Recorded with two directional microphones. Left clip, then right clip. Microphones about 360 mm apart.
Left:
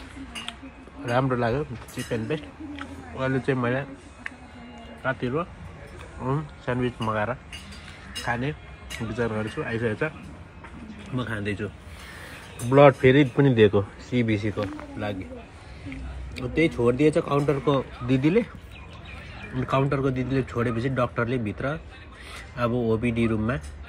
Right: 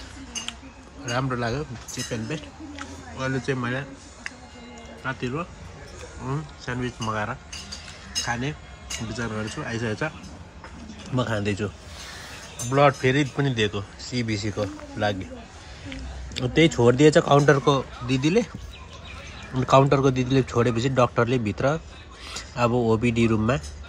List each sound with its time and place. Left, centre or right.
1.0 s a man's voice: centre
11.1 s a man's voice: centre
12.6 s speech: centre
16.3 s speech: centre
17.7 s speech: centre
19.6 s a man's voice: centre